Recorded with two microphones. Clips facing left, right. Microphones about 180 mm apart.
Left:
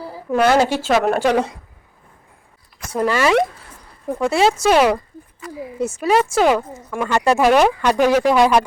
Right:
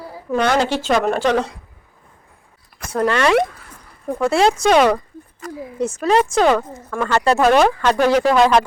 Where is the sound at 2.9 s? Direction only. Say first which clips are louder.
Even; 5° left (ahead or behind).